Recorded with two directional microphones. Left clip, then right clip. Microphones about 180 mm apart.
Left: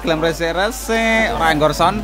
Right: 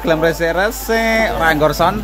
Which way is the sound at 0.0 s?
Centre (ahead or behind).